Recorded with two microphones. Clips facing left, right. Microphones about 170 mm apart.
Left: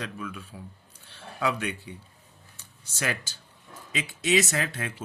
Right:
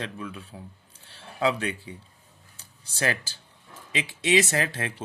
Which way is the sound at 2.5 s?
30° right (ahead or behind).